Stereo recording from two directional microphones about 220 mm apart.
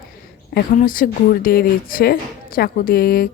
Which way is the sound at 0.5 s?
40° left (ahead or behind).